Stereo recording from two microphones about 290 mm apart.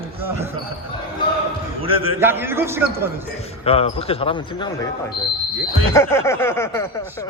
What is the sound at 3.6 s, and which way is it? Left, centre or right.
Speech, centre.